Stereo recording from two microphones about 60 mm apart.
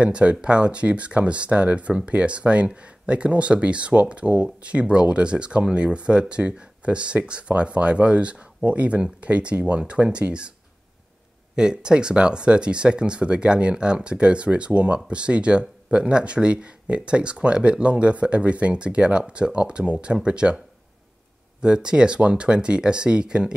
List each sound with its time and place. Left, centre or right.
0.0 s speech: centre
11.5 s speech: centre